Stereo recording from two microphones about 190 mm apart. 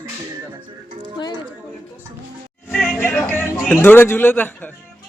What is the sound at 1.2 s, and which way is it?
Speech, 25° left (ahead or behind).